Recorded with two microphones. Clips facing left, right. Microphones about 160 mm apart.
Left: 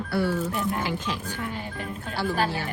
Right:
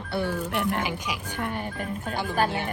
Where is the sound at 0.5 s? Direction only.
70° right (ahead or behind).